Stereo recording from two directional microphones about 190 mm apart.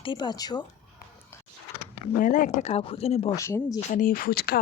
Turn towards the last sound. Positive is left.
turn(degrees=55)  # may be behind; listen again after turning